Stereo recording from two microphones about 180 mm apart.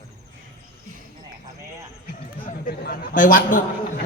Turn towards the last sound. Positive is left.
turn(degrees=50)  # may be behind; listen again after turning